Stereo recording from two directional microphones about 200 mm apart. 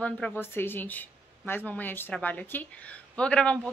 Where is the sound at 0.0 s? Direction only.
10° left (ahead or behind).